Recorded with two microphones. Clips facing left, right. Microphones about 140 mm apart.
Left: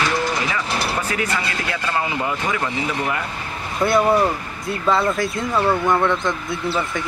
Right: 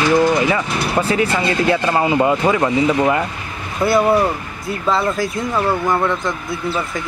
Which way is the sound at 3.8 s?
5° right (ahead or behind).